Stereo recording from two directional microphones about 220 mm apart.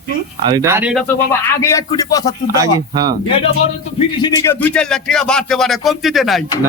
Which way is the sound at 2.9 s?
20° right (ahead or behind).